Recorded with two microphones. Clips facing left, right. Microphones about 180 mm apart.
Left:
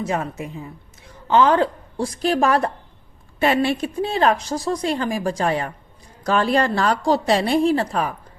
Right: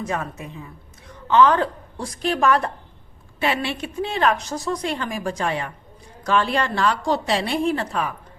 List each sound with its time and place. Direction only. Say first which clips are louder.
0.0 s a woman's voice: left 3 dB; 25° left (ahead or behind)